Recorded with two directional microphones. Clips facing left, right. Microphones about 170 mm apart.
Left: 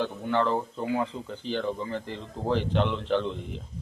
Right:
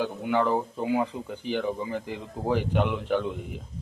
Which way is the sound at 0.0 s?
10° right (ahead or behind).